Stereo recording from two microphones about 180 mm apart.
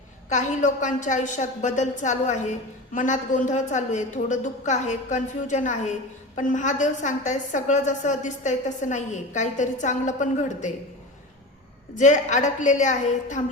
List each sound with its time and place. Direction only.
0.3 s a woman's voice: 40° left (ahead or behind)
11.9 s a woman's voice: 45° left (ahead or behind)